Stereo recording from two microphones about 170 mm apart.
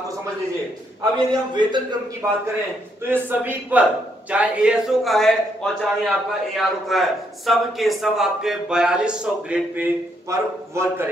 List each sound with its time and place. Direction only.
1.5 s speech: 25° right (ahead or behind)
2.2 s a man's voice: 15° right (ahead or behind)
10.3 s a man's voice: 15° right (ahead or behind)